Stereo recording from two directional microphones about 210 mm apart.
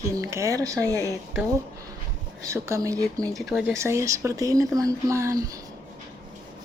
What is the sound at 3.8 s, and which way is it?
A woman's voice, 15° right (ahead or behind).